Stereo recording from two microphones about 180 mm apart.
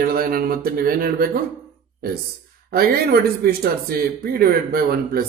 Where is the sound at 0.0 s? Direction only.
55° right (ahead or behind).